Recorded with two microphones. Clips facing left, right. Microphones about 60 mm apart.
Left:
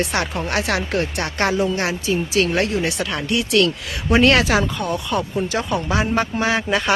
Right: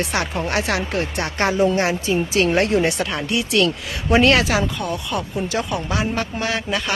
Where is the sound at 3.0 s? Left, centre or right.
Centre.